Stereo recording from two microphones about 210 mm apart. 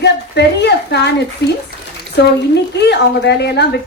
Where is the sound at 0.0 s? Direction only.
55° left (ahead or behind).